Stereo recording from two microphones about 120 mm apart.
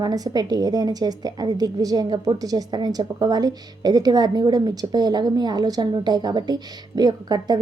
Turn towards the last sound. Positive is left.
turn(degrees=-35)  # may be behind; listen again after turning